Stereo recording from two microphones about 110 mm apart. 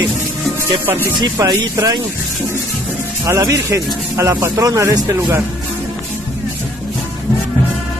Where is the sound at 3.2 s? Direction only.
30° right (ahead or behind).